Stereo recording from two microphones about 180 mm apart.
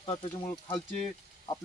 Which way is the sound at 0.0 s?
25° left (ahead or behind).